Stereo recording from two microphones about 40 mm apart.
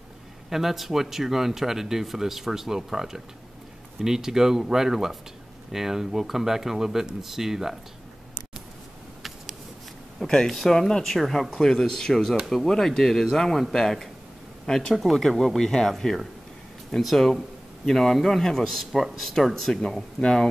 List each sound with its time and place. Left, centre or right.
0.5 s speech: centre
10.2 s a man's voice: centre
11.5 s speech: centre
11.8 s a man's voice: centre
15.1 s speech: centre
16.0 s speech: centre
17.0 s a man's voice: centre